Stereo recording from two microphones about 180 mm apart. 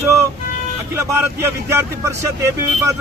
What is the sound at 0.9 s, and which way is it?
Speech, 15° right (ahead or behind).